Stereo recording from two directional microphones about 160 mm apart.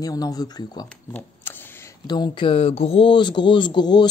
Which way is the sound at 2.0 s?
25° left (ahead or behind).